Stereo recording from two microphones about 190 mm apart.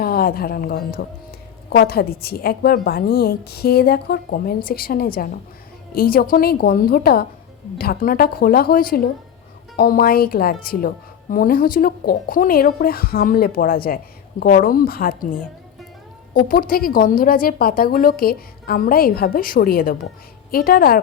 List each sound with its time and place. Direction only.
0.0 s a woman's voice: 50° left (ahead or behind)
16.3 s a woman's voice: 50° left (ahead or behind)